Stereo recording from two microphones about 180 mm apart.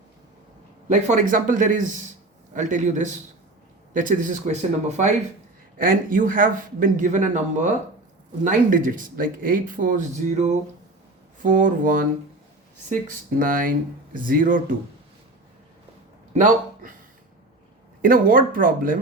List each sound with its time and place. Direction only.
0.9 s speech: 40° right (ahead or behind)
5.7 s speech: 50° right (ahead or behind)
16.3 s speech: 45° right (ahead or behind)
18.0 s speech: 50° right (ahead or behind)